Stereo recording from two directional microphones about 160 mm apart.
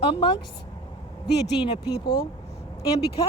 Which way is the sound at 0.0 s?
30° left (ahead or behind).